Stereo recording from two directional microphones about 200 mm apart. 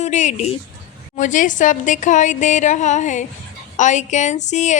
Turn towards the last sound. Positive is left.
turn(degrees=35)  # may be behind; listen again after turning